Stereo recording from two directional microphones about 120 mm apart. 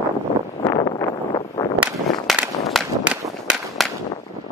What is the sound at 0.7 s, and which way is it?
Vehicle, 35° left (ahead or behind).